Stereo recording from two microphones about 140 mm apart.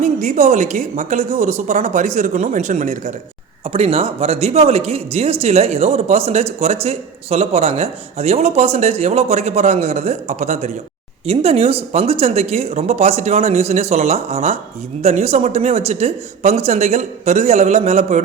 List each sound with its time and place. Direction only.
0.0 s a woman's voice: 55° right (ahead or behind)
3.7 s speech: 45° right (ahead or behind)